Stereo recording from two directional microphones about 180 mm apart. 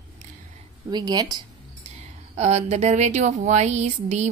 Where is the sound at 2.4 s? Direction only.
35° right (ahead or behind).